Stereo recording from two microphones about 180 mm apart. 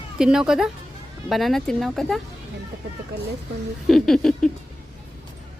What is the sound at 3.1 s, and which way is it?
Speech, 70° right (ahead or behind).